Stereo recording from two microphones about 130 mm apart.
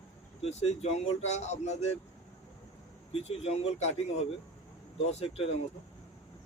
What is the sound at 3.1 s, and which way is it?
Speech, 50° left (ahead or behind).